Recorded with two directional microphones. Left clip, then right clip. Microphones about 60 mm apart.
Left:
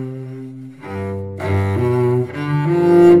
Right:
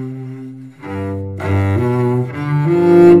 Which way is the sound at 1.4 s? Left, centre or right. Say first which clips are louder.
Right 1 dB; right.